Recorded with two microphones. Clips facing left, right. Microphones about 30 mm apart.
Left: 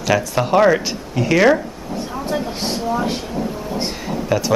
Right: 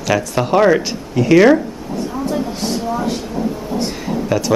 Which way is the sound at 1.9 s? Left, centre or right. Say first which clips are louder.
Right 4 dB; left.